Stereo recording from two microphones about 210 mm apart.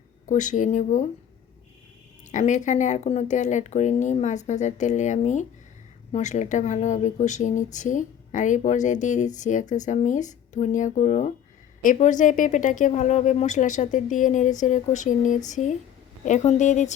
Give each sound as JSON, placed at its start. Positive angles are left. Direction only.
{"t": 0.3, "sound": "speech", "side_deg": 35}
{"t": 2.3, "sound": "speech", "side_deg": 35}